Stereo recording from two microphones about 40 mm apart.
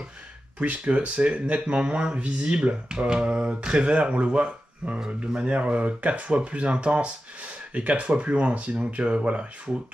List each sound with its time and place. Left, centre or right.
0.6 s speech: right